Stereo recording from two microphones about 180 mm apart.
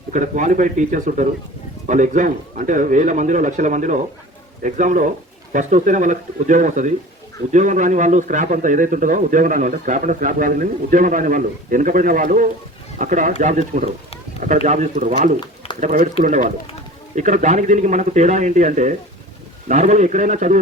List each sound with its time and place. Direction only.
0.1 s a man's voice: 45° right (ahead or behind)
15.4 s a sound: 25° left (ahead or behind)
15.8 s a man's voice: 45° right (ahead or behind)